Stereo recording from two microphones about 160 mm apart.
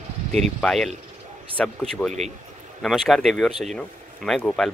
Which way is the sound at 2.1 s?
45° right (ahead or behind).